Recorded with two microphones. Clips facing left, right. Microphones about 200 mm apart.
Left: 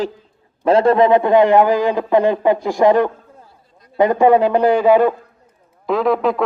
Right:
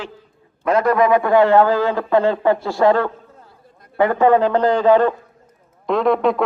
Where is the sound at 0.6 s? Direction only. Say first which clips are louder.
Left 3 dB; 30° left (ahead or behind).